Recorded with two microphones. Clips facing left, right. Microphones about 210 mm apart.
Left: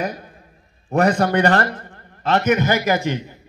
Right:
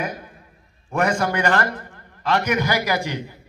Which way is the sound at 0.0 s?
35° left (ahead or behind).